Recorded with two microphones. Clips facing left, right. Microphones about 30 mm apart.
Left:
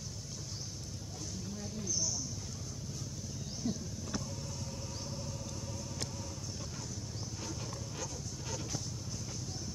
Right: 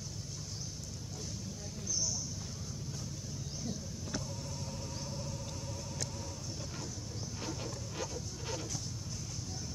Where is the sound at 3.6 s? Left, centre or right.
Centre.